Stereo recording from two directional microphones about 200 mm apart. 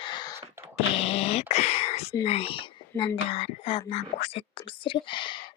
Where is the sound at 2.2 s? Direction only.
30° left (ahead or behind).